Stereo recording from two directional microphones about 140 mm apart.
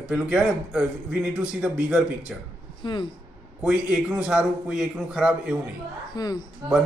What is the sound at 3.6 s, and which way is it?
A man's voice, 5° right (ahead or behind).